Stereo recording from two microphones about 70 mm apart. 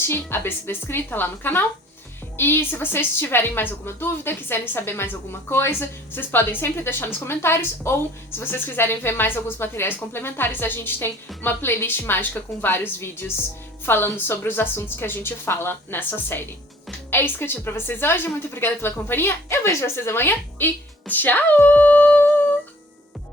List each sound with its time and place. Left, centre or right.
0.0 s a woman's voice: left